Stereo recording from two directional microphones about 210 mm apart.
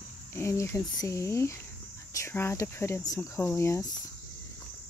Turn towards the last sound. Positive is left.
turn(degrees=15)  # may be behind; listen again after turning